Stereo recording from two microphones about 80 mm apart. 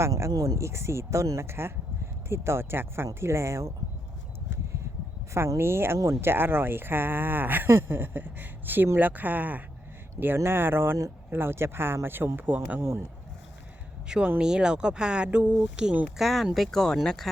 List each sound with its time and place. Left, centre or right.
0.0 s speech: right
5.3 s speech: right
14.1 s speech: centre
16.2 s speech: centre